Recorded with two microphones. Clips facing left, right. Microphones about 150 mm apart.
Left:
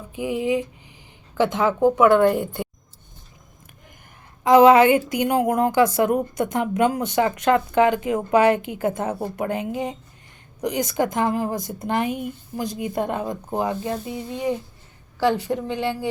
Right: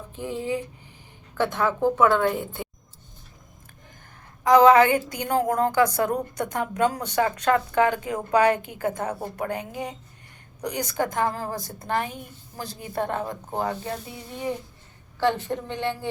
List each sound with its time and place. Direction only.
0.1 s speech: 10° left (ahead or behind)
4.4 s a woman's voice: 20° left (ahead or behind)